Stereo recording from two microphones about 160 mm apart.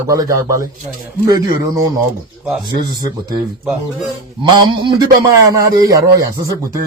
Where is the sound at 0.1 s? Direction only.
20° right (ahead or behind).